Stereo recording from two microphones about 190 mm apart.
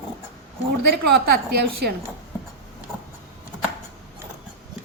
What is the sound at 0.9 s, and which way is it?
A woman's voice, 60° right (ahead or behind).